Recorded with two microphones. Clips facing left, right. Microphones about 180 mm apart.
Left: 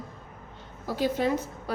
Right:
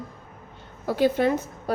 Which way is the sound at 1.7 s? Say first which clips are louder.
Right 6 dB; 45° right (ahead or behind).